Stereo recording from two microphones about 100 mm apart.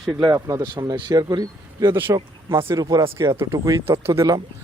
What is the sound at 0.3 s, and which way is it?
Speech, 35° right (ahead or behind).